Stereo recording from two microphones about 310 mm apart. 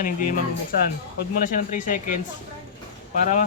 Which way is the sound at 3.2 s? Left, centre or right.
Left.